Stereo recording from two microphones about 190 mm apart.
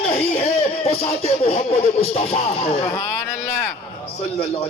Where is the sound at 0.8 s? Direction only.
30° left (ahead or behind).